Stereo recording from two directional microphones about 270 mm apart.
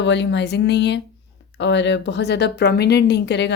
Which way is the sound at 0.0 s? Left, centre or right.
Left.